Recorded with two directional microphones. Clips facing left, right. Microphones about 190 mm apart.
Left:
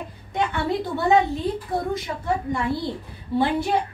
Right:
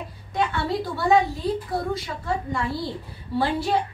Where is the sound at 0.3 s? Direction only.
20° left (ahead or behind).